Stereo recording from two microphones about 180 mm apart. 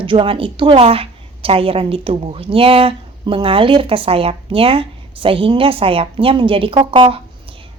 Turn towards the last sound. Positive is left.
turn(degrees=-30)  # may be behind; listen again after turning